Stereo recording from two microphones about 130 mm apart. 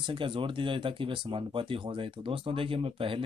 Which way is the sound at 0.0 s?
40° right (ahead or behind).